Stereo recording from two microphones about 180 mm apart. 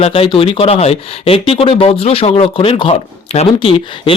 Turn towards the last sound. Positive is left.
turn(degrees=30)  # may be behind; listen again after turning